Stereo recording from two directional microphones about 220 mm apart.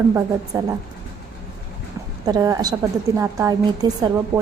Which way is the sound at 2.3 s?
15° right (ahead or behind).